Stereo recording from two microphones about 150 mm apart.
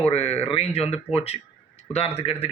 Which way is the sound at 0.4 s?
40° left (ahead or behind).